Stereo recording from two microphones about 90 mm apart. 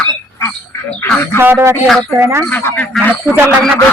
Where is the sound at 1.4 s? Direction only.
25° right (ahead or behind).